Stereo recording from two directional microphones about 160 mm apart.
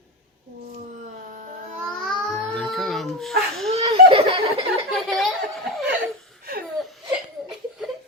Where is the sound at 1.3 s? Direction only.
50° right (ahead or behind).